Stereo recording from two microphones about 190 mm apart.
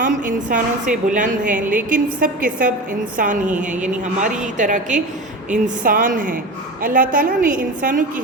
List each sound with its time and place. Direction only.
0.0 s a woman's voice: 45° right (ahead or behind)